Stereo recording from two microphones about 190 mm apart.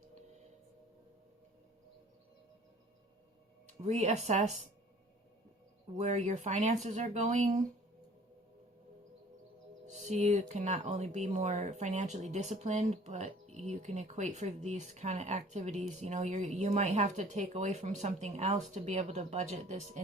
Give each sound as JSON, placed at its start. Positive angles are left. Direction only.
{"t": 3.7, "sound": "speech", "side_deg": -35}
{"t": 6.0, "sound": "speech", "side_deg": -40}
{"t": 9.8, "sound": "speech", "side_deg": -40}